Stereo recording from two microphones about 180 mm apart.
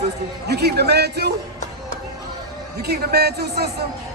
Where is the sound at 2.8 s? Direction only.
65° right (ahead or behind).